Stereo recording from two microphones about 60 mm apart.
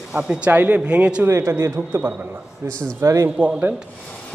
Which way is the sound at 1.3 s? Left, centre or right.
Right.